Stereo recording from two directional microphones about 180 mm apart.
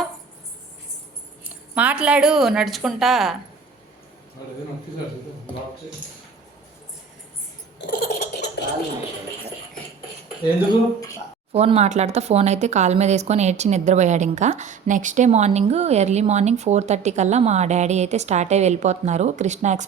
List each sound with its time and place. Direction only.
1.5 s a woman's voice: 10° right (ahead or behind)
7.8 s a sound: 65° left (ahead or behind)
10.7 s speech: 20° left (ahead or behind)
11.5 s speech: 35° right (ahead or behind)